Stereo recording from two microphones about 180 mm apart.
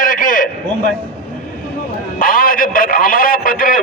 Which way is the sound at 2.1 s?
50° left (ahead or behind).